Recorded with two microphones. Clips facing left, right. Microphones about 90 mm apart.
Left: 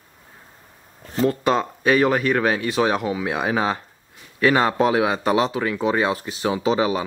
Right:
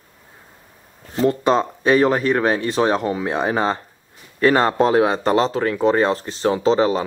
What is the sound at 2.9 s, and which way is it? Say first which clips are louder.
Speech: right 2 dB; 5° left (ahead or behind).